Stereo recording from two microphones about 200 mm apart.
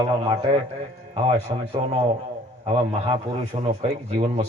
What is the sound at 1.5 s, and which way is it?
Speech, 25° right (ahead or behind).